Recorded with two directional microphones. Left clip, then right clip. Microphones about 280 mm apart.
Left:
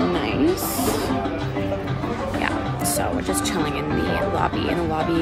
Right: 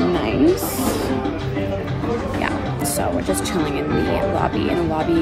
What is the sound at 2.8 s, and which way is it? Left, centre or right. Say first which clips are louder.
Speech: right 3 dB; centre.